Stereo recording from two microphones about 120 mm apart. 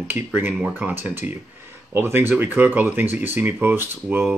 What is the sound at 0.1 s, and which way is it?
Speech, 15° right (ahead or behind).